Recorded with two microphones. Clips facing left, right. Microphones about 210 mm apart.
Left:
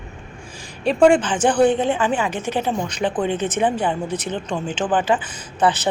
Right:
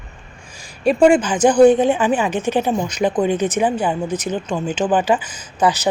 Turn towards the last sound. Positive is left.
turn(degrees=-10)  # may be behind; listen again after turning